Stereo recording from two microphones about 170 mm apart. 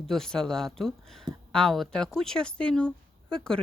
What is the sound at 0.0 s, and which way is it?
Speech, 5° left (ahead or behind).